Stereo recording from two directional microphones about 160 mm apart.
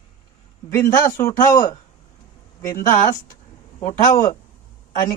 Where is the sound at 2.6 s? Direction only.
20° left (ahead or behind).